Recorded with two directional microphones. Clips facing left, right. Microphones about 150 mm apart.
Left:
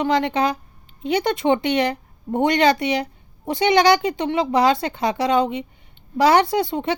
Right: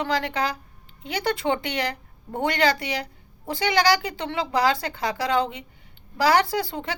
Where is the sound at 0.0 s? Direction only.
20° left (ahead or behind).